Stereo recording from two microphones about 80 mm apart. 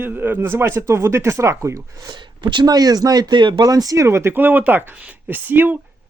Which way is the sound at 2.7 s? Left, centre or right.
Right.